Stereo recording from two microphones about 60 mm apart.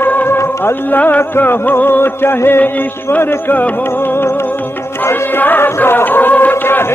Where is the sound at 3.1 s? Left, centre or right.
Left.